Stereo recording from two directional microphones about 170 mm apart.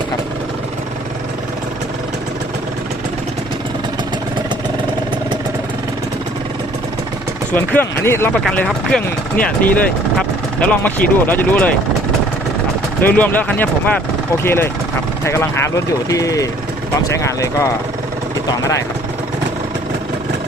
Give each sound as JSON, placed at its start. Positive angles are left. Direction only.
{"t": 7.5, "sound": "speech", "side_deg": 10}
{"t": 8.4, "sound": "speech", "side_deg": 5}
{"t": 13.0, "sound": "speech", "side_deg": 10}